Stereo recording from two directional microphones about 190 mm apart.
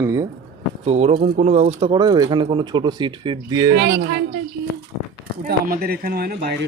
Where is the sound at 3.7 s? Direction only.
60° right (ahead or behind).